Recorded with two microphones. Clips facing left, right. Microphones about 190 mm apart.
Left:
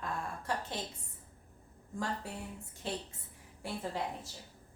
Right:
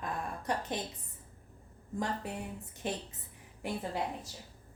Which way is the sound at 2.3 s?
20° right (ahead or behind).